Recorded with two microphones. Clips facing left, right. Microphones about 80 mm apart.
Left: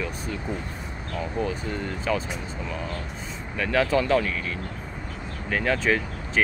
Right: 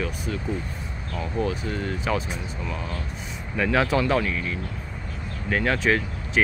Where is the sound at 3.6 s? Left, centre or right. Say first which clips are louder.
Right 1 dB; centre.